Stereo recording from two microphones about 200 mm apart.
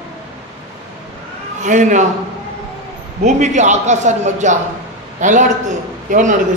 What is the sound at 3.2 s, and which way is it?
A man's voice, 35° right (ahead or behind).